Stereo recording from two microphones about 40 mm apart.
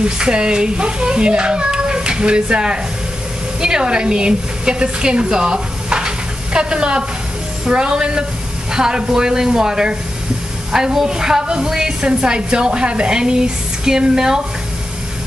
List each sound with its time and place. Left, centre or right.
0.0 s a child's voice: right